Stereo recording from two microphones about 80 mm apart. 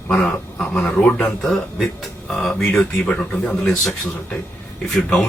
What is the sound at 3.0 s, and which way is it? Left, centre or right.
Speech, centre.